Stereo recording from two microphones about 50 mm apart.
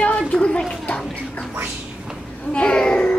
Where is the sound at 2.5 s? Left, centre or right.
Centre.